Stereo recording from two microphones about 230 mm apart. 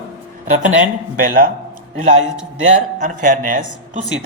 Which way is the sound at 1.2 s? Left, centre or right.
Right.